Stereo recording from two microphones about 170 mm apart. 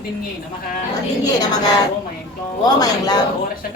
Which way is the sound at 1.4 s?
25° left (ahead or behind).